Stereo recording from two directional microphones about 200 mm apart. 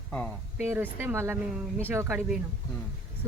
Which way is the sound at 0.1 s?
5° left (ahead or behind).